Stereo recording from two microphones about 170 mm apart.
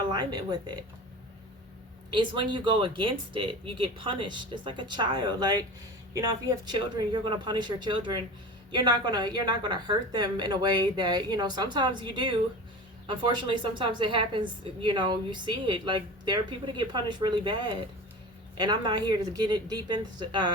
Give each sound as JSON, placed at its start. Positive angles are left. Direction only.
{"t": 0.1, "sound": "a woman's voice", "side_deg": -25}
{"t": 2.0, "sound": "a woman's voice", "side_deg": -30}